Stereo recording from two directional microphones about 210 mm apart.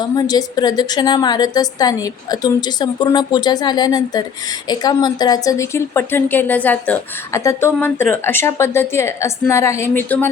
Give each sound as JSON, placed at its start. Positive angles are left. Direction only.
{"t": 0.0, "sound": "a woman's voice", "side_deg": 20}